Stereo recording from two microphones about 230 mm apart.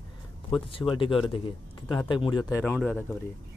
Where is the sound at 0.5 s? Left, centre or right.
Left.